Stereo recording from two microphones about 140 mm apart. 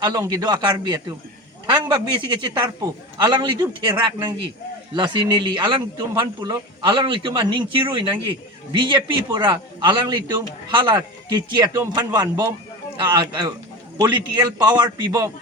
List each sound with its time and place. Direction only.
0.0 s speech: 30° right (ahead or behind)